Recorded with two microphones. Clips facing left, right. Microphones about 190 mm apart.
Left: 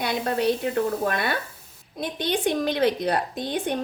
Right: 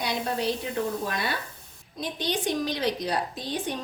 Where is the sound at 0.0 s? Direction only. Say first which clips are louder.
Left 4 dB; 60° left (ahead or behind).